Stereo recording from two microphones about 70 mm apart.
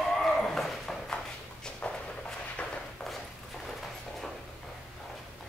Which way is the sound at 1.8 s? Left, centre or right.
Left.